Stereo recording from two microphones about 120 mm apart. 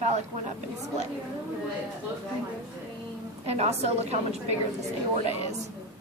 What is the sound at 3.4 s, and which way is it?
A woman's voice, 60° right (ahead or behind).